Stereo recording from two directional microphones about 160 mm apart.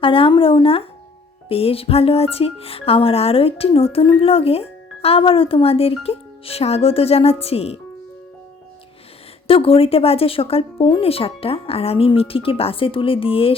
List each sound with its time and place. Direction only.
0.0 s music: 35° left (ahead or behind)
9.5 s music: 35° left (ahead or behind)